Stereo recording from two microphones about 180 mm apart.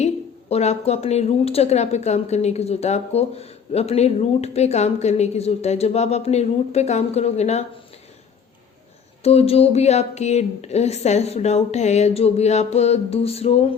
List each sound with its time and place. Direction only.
0.5 s a woman's voice: 35° left (ahead or behind)
9.2 s a woman's voice: 35° left (ahead or behind)